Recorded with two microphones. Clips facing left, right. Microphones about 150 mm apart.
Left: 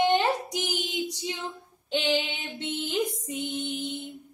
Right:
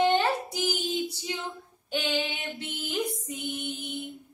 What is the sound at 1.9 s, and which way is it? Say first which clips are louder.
A woman's voice: left 3 dB; 20° left (ahead or behind).